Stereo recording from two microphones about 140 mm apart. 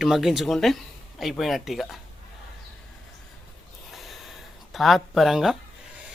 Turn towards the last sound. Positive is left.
turn(degrees=0)  # may be behind; listen again after turning